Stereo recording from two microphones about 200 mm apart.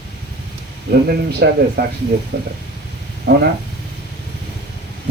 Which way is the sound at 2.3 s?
70° right (ahead or behind).